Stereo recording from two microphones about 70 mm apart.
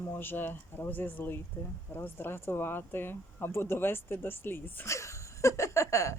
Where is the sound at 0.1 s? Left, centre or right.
Left.